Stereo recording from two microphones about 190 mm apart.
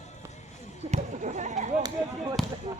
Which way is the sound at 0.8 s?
35° right (ahead or behind).